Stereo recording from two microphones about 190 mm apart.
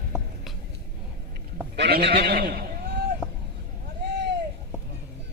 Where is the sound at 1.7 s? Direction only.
60° right (ahead or behind).